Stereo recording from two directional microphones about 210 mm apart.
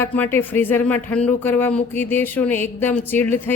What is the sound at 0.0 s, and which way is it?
Speech, 10° left (ahead or behind).